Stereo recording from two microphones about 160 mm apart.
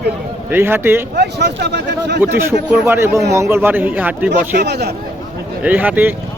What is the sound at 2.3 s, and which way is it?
A man's voice, 15° right (ahead or behind).